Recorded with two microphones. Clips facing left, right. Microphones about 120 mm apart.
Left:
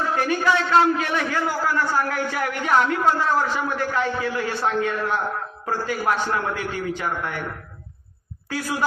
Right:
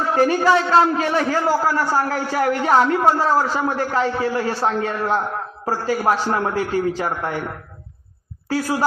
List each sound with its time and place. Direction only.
0.2 s a man's voice: 35° right (ahead or behind)